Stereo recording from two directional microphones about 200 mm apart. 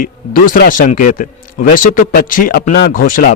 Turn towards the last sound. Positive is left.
turn(degrees=45)  # may be behind; listen again after turning